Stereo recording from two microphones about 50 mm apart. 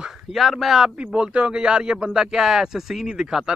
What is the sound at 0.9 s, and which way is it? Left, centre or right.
A man's voice, right.